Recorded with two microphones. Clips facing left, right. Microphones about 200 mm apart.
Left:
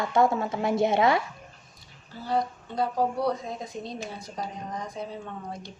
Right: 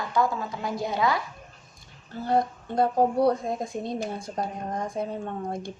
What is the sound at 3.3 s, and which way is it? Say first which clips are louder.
A woman's voice: right 5 dB; 50° right (ahead or behind).